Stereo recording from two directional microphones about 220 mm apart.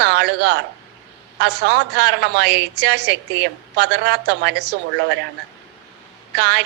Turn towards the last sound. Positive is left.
turn(degrees=-50)  # may be behind; listen again after turning